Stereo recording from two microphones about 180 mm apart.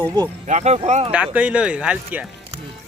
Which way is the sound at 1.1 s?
5° right (ahead or behind).